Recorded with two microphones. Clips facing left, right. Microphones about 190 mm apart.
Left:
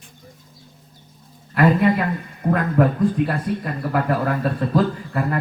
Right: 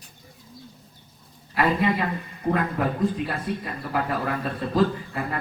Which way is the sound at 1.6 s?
50° left (ahead or behind).